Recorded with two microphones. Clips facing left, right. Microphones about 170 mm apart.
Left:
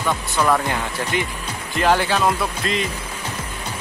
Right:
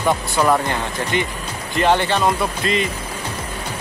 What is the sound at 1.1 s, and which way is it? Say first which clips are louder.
Speech: right 2 dB; 5° left (ahead or behind).